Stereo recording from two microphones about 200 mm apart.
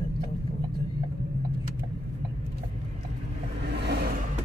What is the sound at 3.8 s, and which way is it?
Vehicle, 55° right (ahead or behind).